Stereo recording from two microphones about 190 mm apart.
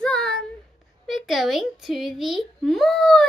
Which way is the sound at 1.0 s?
Centre (ahead or behind).